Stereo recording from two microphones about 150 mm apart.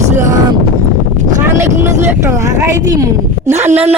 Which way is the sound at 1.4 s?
20° right (ahead or behind).